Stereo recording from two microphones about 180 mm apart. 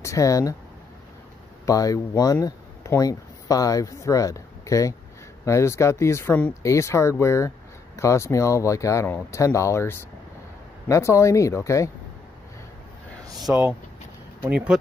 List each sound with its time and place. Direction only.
0.0 s speech: 20° left (ahead or behind)
1.7 s speech: 20° left (ahead or behind)
13.4 s speech: 5° right (ahead or behind)